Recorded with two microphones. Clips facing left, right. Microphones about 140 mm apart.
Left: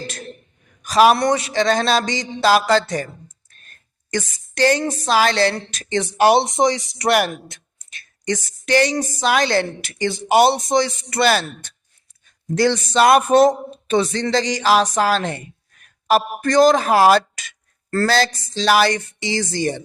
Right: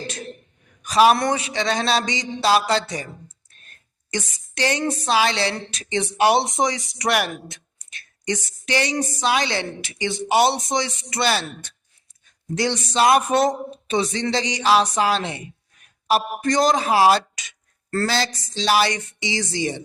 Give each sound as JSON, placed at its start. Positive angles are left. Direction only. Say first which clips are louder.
{"t": 1.1, "sound": "speech", "louder": "left 4 dB", "side_deg": 35}
{"t": 4.1, "sound": "speech", "louder": "left 4 dB", "side_deg": 45}
{"t": 14.0, "sound": "speech", "louder": "left 3 dB", "side_deg": 40}
{"t": 16.5, "sound": "speech", "louder": "left 5 dB", "side_deg": 50}